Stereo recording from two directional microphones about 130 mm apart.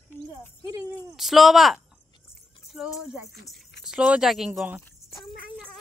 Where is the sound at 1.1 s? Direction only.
Centre (ahead or behind).